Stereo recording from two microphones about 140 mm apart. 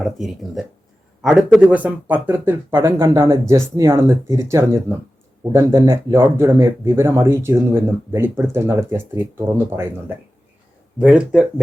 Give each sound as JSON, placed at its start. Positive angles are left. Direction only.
{"t": 0.0, "sound": "speech", "side_deg": 0}
{"t": 11.0, "sound": "speech", "side_deg": -5}